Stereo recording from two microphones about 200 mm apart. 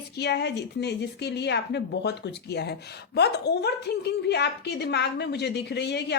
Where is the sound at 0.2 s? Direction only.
55° left (ahead or behind).